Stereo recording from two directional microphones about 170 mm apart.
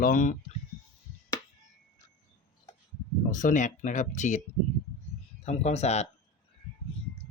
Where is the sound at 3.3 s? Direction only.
50° left (ahead or behind).